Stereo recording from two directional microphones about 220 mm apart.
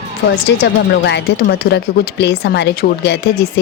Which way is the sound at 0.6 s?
50° left (ahead or behind).